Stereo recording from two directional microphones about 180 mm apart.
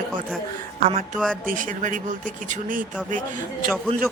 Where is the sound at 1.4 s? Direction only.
50° right (ahead or behind).